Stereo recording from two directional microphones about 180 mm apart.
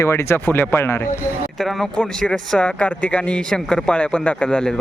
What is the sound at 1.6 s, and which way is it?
Speech, centre (ahead or behind).